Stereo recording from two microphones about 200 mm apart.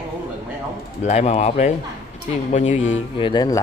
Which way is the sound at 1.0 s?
35° left (ahead or behind).